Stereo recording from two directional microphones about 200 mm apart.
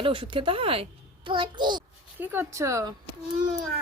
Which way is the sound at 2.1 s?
10° right (ahead or behind).